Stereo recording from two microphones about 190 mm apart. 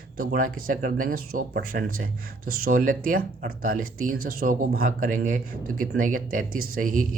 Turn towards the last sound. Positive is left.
turn(degrees=-45)  # may be behind; listen again after turning